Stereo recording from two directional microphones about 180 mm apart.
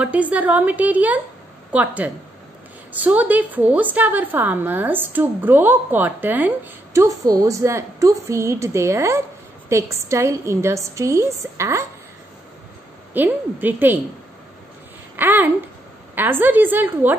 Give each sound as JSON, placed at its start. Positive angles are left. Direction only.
{"t": 0.0, "sound": "a woman's voice", "side_deg": -5}
{"t": 13.1, "sound": "a woman's voice", "side_deg": -10}
{"t": 15.1, "sound": "a woman's voice", "side_deg": -10}